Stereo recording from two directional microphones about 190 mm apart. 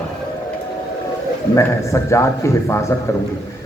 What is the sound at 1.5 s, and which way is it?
Speech, 15° left (ahead or behind).